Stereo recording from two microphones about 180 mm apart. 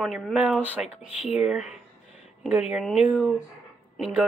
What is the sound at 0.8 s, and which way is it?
Speech, 30° left (ahead or behind).